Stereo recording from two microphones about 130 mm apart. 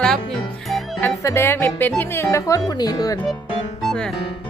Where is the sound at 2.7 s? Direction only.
30° left (ahead or behind).